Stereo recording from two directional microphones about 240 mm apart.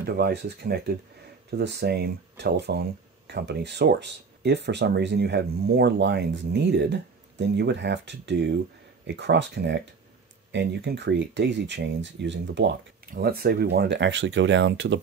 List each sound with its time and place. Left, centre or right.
0.0 s speech: right